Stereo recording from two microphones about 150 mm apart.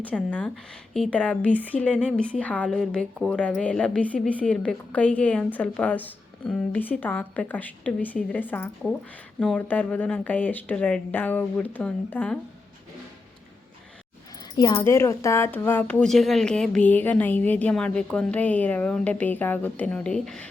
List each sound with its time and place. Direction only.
0.0 s a woman's voice: 10° left (ahead or behind)
14.5 s speech: 30° left (ahead or behind)
14.8 s a woman's voice: 15° left (ahead or behind)